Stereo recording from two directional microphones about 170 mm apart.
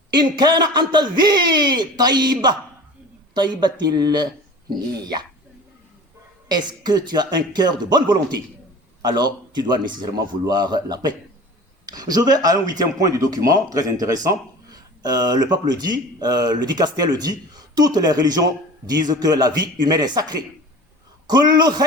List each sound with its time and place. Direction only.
0.1 s speech: 25° right (ahead or behind)
6.5 s speech: 25° right (ahead or behind)